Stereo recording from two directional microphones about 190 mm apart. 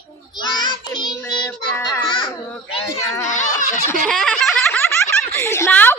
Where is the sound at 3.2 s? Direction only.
40° left (ahead or behind).